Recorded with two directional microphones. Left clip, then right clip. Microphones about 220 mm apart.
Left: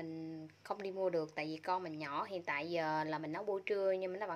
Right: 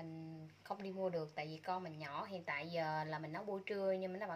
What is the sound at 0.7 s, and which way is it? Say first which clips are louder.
A woman's voice: left 4 dB; 40° left (ahead or behind).